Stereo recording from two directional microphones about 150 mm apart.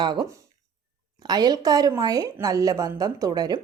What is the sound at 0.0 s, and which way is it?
A woman's voice, 30° right (ahead or behind).